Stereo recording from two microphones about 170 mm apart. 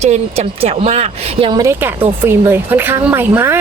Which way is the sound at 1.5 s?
15° right (ahead or behind).